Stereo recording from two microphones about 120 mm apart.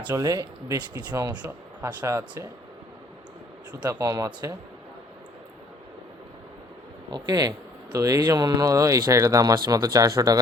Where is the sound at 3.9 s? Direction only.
30° right (ahead or behind).